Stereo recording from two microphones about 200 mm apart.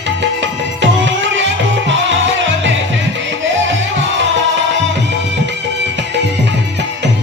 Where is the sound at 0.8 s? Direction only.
65° right (ahead or behind).